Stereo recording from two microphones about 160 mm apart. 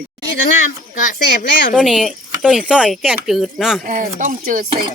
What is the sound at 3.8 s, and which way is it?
Speech, 60° right (ahead or behind).